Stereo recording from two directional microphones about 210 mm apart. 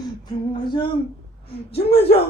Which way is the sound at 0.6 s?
20° left (ahead or behind).